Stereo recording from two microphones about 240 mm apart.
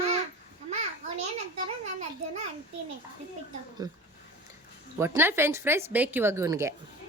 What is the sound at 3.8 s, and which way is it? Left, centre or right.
Speech, centre.